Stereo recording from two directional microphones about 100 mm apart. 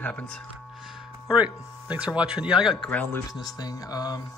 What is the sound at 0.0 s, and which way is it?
Speech, 10° left (ahead or behind).